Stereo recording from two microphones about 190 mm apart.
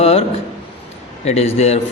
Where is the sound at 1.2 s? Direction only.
35° left (ahead or behind).